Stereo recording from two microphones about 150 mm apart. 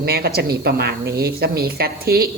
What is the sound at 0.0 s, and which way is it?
Speech, 90° right.